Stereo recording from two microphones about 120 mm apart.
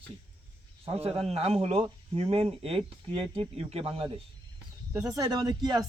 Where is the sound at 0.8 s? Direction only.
55° right (ahead or behind).